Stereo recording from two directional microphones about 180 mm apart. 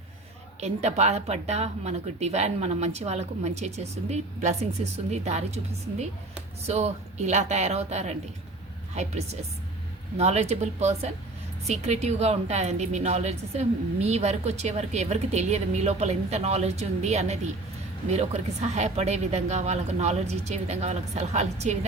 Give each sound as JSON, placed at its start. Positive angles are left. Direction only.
{"t": 0.6, "sound": "a woman's voice", "side_deg": -40}
{"t": 6.7, "sound": "a woman's voice", "side_deg": -40}